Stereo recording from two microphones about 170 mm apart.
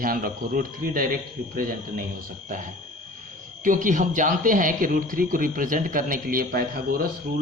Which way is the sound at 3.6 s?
50° right (ahead or behind).